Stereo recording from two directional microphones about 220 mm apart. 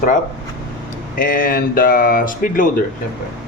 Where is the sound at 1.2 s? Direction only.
40° left (ahead or behind).